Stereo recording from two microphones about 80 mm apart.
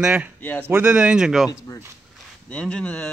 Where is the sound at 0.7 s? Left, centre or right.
Right.